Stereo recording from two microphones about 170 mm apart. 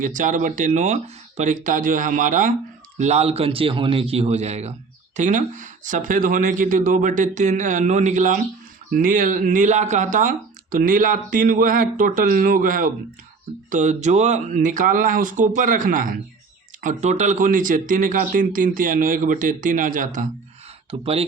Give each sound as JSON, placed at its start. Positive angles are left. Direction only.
{"t": 0.0, "sound": "a man's voice", "side_deg": -50}
{"t": 21.0, "sound": "a man's voice", "side_deg": -35}